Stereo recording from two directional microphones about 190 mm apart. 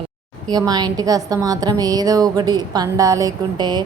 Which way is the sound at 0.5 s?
20° right (ahead or behind).